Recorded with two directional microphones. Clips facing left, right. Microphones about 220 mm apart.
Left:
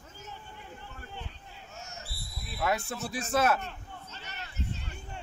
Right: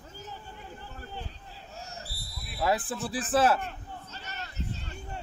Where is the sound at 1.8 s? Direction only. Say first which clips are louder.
Right 2 dB; 35° right (ahead or behind).